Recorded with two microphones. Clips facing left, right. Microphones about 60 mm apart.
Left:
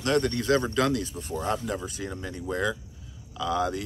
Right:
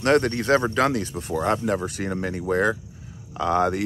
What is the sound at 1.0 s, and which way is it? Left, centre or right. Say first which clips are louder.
Speech: right 6 dB; right.